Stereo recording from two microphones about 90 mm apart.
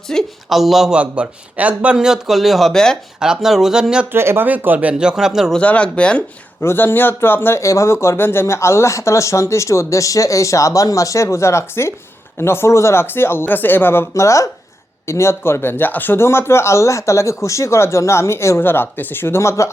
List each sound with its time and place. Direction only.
0.1 s speech: 10° left (ahead or behind)
0.4 s a man's voice: centre (ahead or behind)
3.2 s a man's voice: 5° right (ahead or behind)
4.1 s speech: 25° right (ahead or behind); by 5.5 s 5° right (ahead or behind)
5.5 s speech: 15° left (ahead or behind)
6.6 s speech: 25° left (ahead or behind)